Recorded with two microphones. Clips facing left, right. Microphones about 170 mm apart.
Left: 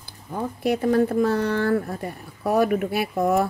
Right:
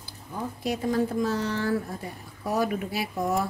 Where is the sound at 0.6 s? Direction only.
60° left (ahead or behind).